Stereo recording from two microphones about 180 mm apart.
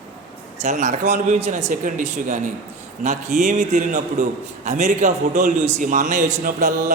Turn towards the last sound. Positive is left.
turn(degrees=-45)  # may be behind; listen again after turning